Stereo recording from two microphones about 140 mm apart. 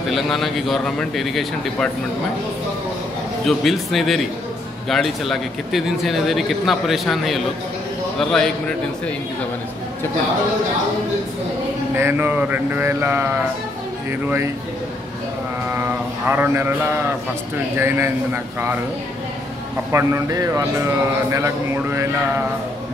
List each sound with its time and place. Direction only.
0.1 s a man's voice: centre (ahead or behind)
3.4 s a man's voice: centre (ahead or behind)
11.9 s a sound: 15° right (ahead or behind)
14.2 s a man's voice: 20° right (ahead or behind)
16.3 s a sound: 15° right (ahead or behind)
19.9 s a man's voice: 20° right (ahead or behind)